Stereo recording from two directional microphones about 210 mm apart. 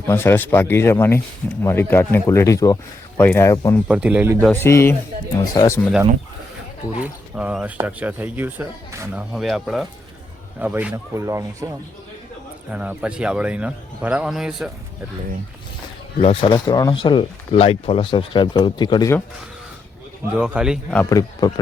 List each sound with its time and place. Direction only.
0.1 s speech: 10° left (ahead or behind)
3.8 s speech: 5° right (ahead or behind)
4.5 s speech: 10° left (ahead or behind)
7.0 s speech: 5° right (ahead or behind)
12.7 s speech: 5° right (ahead or behind)
16.2 s speech: 25° left (ahead or behind)
20.4 s speech: 5° right (ahead or behind)
21.0 s speech: 15° left (ahead or behind)